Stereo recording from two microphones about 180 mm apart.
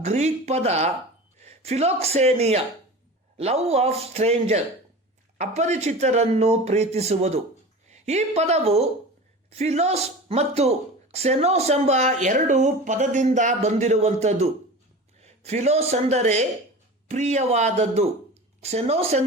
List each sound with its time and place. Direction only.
0.0 s a woman's voice: 40° right (ahead or behind)